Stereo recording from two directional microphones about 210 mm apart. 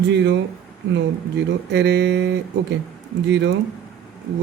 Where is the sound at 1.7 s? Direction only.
55° right (ahead or behind).